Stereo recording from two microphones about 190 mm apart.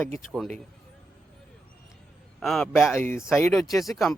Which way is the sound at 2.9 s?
10° left (ahead or behind).